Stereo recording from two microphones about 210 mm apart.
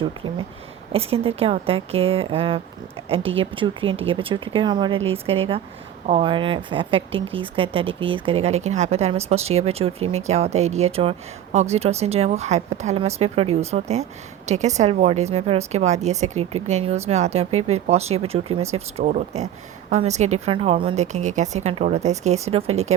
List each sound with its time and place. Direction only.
0.9 s a woman's voice: 25° right (ahead or behind)